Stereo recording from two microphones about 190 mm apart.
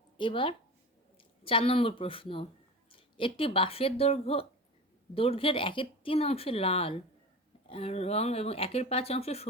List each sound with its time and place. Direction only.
0.2 s speech: 25° left (ahead or behind)